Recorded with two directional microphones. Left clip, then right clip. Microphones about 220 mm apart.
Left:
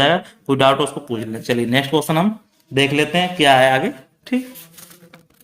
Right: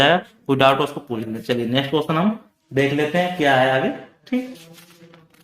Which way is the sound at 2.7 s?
35° left (ahead or behind).